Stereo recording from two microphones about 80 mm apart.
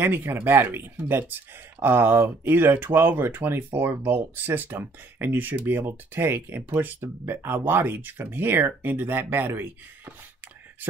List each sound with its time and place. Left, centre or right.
0.0 s speech: right